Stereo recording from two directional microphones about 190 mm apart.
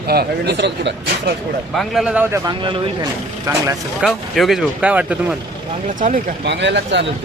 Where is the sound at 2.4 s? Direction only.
25° right (ahead or behind).